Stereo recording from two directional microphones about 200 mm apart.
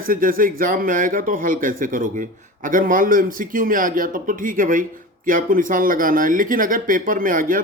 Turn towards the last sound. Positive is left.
turn(degrees=-45)  # may be behind; listen again after turning